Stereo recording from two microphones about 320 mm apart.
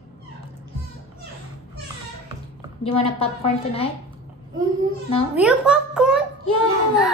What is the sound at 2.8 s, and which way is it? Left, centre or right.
Speech, centre.